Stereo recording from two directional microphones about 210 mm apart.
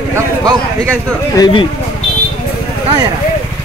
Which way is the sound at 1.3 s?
20° left (ahead or behind).